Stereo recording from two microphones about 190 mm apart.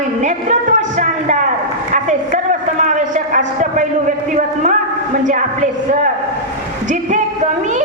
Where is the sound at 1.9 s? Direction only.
40° right (ahead or behind).